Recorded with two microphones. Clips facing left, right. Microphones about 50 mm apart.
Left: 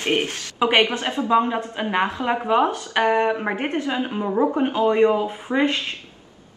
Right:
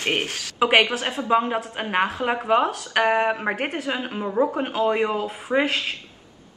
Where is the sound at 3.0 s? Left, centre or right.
Centre.